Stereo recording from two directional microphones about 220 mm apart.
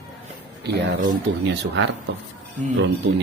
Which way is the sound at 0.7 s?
50° right (ahead or behind).